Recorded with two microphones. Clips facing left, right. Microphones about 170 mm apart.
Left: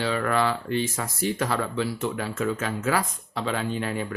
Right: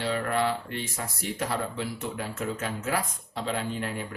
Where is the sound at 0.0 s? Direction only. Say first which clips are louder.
Left 3 dB; 90° left.